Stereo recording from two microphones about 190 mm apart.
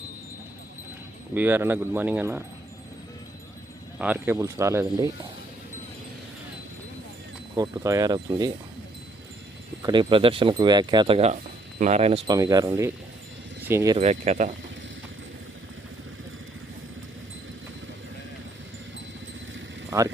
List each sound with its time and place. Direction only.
1.3 s speech: 10° right (ahead or behind)
3.9 s speech: 5° right (ahead or behind)
7.5 s speech: 20° right (ahead or behind)
9.8 s speech: 25° right (ahead or behind)
12.3 s speech: 20° right (ahead or behind)
14.0 s speech: 40° right (ahead or behind)